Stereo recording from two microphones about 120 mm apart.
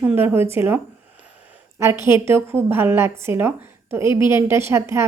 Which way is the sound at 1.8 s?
20° right (ahead or behind).